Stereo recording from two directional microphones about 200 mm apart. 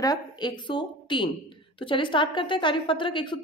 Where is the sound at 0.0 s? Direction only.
20° left (ahead or behind).